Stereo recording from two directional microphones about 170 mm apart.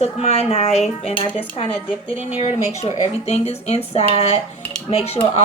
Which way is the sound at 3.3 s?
40° left (ahead or behind).